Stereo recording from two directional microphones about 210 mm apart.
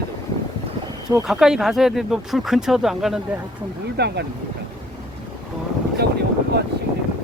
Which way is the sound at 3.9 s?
50° right (ahead or behind).